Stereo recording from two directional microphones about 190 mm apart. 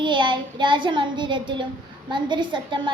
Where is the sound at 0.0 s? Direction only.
25° right (ahead or behind).